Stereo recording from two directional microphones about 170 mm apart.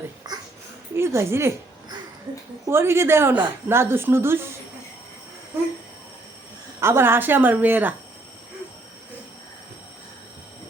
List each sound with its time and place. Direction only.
0.3 s a sound: 25° right (ahead or behind)
0.9 s a woman's voice: 15° right (ahead or behind)
2.6 s a woman's voice: 15° right (ahead or behind)
6.7 s a woman's voice: 15° right (ahead or behind)